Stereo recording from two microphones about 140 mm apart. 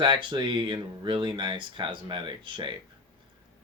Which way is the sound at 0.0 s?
35° right (ahead or behind).